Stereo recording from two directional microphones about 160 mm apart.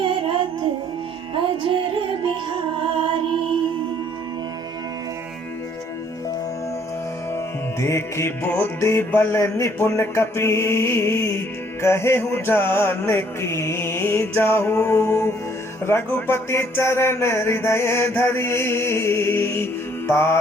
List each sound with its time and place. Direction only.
0.0 s child singing: 30° right (ahead or behind)
1.7 s music: 35° right (ahead or behind)
7.3 s music: 20° left (ahead or behind)